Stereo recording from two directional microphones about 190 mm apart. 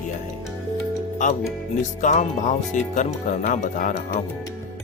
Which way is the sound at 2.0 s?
40° left (ahead or behind).